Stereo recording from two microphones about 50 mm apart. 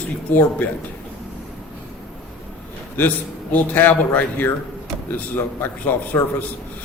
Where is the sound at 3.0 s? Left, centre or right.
Left.